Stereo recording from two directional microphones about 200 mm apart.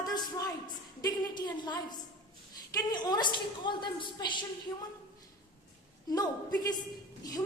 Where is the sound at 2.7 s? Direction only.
20° left (ahead or behind).